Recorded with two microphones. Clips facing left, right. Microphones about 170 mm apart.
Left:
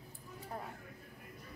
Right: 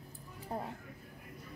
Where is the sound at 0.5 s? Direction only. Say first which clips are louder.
Right 5 dB; 25° right (ahead or behind).